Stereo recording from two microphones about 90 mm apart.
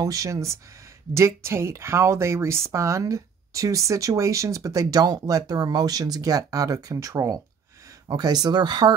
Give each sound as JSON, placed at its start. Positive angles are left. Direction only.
{"t": 0.0, "sound": "speech", "side_deg": -40}